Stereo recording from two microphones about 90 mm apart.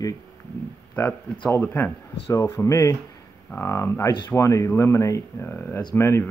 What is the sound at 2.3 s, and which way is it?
Speech, 35° left (ahead or behind).